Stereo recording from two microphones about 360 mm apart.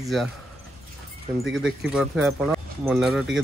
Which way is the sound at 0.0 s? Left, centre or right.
Centre.